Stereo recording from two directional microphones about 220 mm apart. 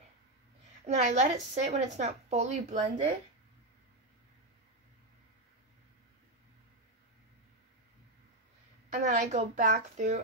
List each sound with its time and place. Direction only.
0.8 s a woman's voice: 30° right (ahead or behind)
8.9 s a woman's voice: 30° right (ahead or behind)